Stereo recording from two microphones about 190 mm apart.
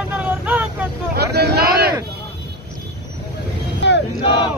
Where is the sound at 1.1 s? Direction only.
60° right (ahead or behind).